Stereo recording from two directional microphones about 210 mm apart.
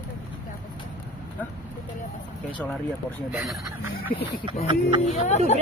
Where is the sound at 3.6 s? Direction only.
15° right (ahead or behind).